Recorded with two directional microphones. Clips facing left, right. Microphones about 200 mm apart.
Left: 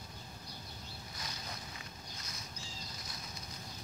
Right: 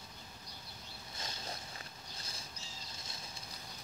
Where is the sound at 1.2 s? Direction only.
25° right (ahead or behind).